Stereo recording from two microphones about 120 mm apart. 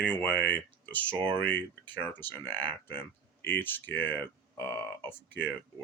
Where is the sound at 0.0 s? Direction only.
15° left (ahead or behind).